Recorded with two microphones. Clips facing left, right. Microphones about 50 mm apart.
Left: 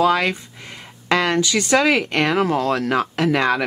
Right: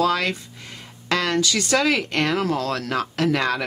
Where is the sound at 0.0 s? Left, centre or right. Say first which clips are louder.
Left 4 dB; left.